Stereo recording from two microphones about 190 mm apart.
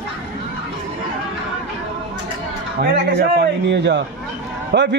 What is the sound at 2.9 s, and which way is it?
A man's voice, 60° right (ahead or behind).